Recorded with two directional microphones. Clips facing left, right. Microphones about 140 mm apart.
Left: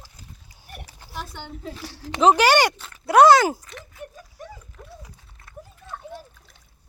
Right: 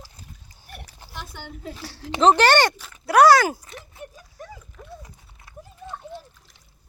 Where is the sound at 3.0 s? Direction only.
20° left (ahead or behind).